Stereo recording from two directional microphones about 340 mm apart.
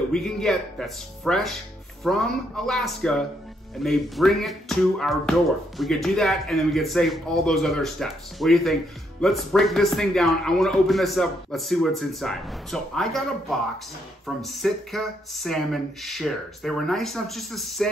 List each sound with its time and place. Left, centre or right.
0.1 s a man's voice: centre